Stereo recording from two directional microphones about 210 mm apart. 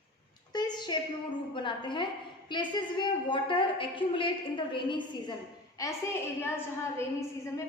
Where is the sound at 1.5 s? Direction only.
20° left (ahead or behind).